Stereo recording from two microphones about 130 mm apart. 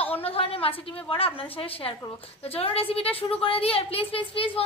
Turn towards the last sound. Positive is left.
turn(degrees=45)  # may be behind; listen again after turning